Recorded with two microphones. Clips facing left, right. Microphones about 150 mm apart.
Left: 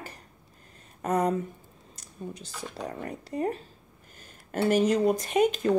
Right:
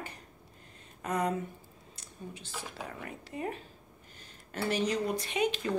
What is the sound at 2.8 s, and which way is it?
Speech, 40° left (ahead or behind).